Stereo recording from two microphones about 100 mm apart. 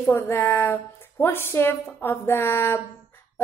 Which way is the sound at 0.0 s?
20° left (ahead or behind).